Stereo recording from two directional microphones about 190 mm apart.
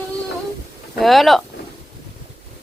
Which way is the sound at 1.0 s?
Centre (ahead or behind).